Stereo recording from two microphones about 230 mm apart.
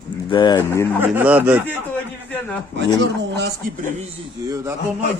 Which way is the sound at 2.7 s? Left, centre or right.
Right.